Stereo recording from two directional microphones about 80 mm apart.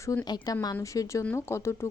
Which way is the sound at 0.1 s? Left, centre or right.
Left.